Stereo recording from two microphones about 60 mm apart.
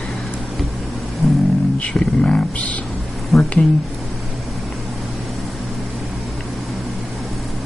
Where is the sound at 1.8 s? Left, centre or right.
Centre.